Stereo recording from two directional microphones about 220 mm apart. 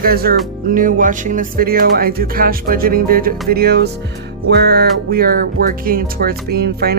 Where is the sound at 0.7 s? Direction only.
40° right (ahead or behind).